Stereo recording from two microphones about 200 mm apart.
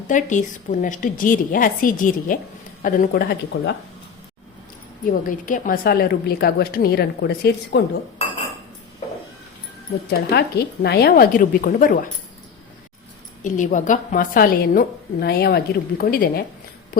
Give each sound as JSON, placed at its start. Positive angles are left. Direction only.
{"t": 0.1, "sound": "a woman's voice", "side_deg": 40}
{"t": 5.0, "sound": "a woman's voice", "side_deg": 40}
{"t": 10.1, "sound": "a woman's voice", "side_deg": 55}
{"t": 13.4, "sound": "a woman's voice", "side_deg": 40}